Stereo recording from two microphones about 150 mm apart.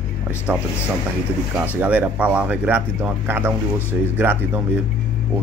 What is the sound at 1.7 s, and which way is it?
Speech, 10° right (ahead or behind).